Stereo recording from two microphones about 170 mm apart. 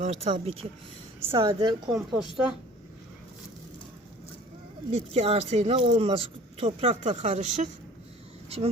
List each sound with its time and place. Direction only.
0.0 s speech: 35° right (ahead or behind)
1.9 s speech: centre (ahead or behind)
4.9 s speech: 40° right (ahead or behind)